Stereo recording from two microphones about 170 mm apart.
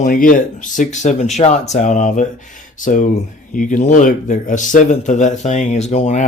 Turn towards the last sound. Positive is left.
turn(degrees=45)  # may be behind; listen again after turning